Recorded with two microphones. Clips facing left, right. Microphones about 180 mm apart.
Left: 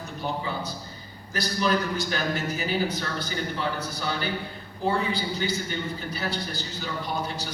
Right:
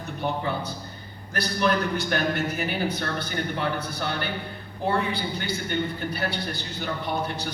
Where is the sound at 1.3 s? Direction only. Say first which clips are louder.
Right 1 dB; 60° right (ahead or behind).